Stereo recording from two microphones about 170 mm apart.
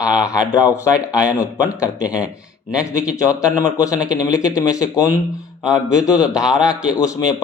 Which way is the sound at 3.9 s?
20° left (ahead or behind).